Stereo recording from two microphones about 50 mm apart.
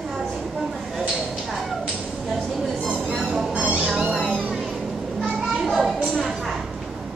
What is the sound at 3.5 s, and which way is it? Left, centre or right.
Music, right.